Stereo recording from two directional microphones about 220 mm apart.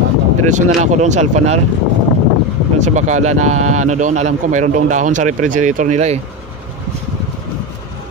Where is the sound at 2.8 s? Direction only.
30° right (ahead or behind).